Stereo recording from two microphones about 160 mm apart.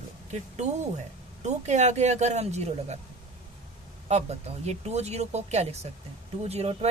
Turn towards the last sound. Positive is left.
turn(degrees=-40)  # may be behind; listen again after turning